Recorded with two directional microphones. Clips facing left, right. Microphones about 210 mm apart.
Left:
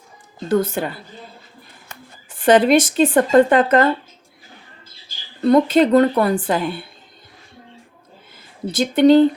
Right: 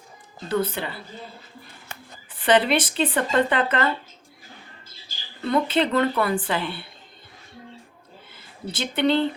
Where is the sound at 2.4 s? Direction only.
45° left (ahead or behind).